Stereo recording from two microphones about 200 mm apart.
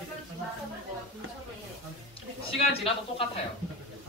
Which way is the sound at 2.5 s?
30° left (ahead or behind).